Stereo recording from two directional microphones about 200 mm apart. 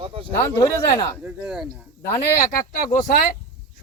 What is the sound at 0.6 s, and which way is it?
Speech, 15° left (ahead or behind).